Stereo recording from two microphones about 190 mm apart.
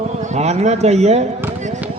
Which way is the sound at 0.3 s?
35° right (ahead or behind).